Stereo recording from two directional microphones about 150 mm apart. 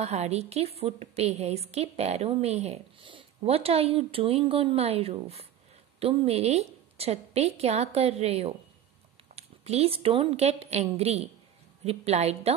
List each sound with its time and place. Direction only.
0.0 s a woman's voice: 45° right (ahead or behind)